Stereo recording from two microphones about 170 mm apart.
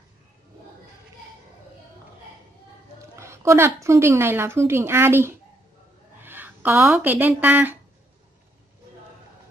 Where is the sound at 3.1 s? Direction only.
15° right (ahead or behind).